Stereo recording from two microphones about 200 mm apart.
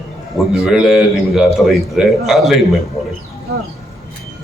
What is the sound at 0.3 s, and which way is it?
A man's voice, centre (ahead or behind).